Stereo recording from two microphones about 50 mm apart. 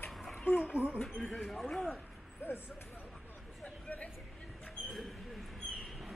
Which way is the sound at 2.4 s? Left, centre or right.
Left.